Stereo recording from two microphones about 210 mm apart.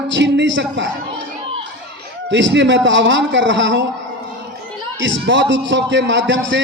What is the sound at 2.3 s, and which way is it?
A man's voice, 60° right (ahead or behind).